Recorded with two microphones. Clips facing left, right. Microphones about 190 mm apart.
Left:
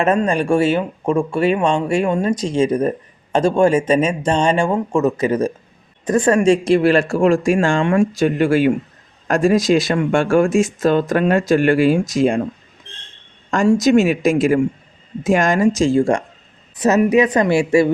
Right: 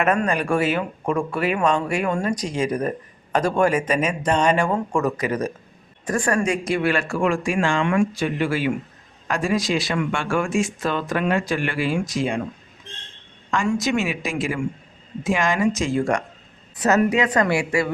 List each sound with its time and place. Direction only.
0.0 s speech: 25° left (ahead or behind); by 12.4 s 45° left (ahead or behind)
13.7 s a woman's voice: 40° left (ahead or behind); by 17.8 s 25° left (ahead or behind)